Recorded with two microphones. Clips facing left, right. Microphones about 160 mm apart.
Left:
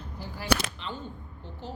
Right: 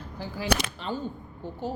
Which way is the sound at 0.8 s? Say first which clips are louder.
Right 9 dB; 45° right (ahead or behind).